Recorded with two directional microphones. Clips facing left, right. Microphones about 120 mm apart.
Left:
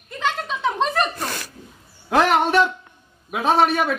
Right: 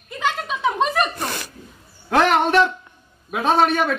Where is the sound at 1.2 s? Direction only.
20° right (ahead or behind).